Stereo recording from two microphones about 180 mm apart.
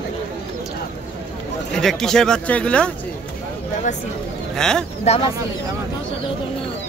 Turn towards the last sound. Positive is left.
turn(degrees=35)  # may be behind; listen again after turning